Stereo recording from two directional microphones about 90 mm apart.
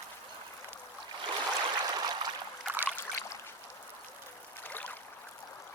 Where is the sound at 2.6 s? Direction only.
5° left (ahead or behind).